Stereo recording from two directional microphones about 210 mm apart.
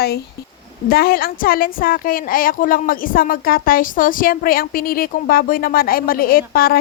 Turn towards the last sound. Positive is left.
turn(degrees=45)  # may be behind; listen again after turning